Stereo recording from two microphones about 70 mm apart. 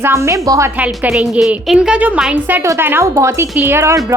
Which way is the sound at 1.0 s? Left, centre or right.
Centre.